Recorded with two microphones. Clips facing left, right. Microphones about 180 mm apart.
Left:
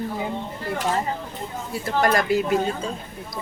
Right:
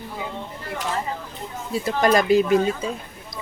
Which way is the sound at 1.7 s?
20° right (ahead or behind).